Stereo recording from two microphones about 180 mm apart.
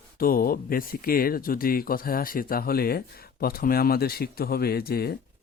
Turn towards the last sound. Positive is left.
turn(degrees=60)  # may be behind; listen again after turning